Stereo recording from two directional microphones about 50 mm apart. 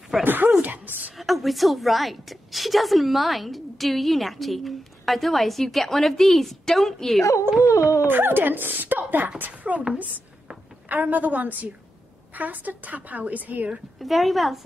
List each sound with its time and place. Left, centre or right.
0.2 s speech: right
1.1 s a woman's voice: centre
8.0 s a woman's voice: right
10.9 s speech: right
13.9 s a woman's voice: centre